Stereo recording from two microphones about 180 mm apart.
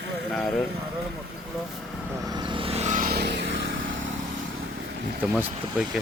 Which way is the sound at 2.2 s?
25° right (ahead or behind).